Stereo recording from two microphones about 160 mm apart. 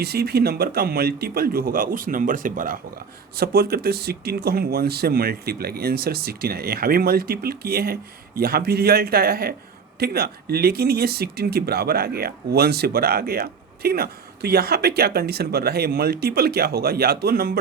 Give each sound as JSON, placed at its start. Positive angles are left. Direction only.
{"t": 0.0, "sound": "speech", "side_deg": -80}
{"t": 3.3, "sound": "speech", "side_deg": -75}